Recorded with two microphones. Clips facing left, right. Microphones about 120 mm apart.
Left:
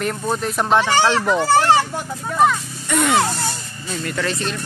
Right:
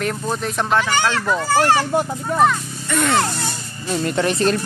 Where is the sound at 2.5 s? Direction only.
5° left (ahead or behind).